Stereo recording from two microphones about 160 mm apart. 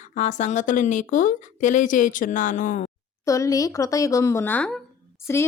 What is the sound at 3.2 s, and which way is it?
A woman's voice, 20° left (ahead or behind).